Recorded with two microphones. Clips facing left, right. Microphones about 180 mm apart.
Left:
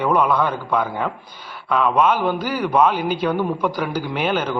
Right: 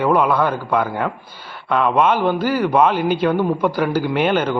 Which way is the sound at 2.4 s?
50° right (ahead or behind).